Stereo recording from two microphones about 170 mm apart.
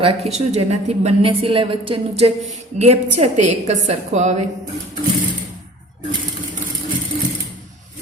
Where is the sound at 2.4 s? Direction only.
40° right (ahead or behind).